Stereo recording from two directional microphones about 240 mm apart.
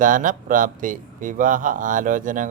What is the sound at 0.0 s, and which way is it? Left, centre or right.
Speech, right.